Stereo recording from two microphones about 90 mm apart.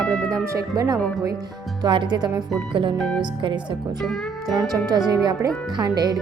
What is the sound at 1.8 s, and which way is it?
Speech, 60° right (ahead or behind).